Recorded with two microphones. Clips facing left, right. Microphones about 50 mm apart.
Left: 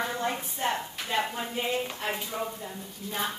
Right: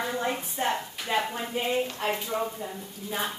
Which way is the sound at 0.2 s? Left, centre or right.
Centre.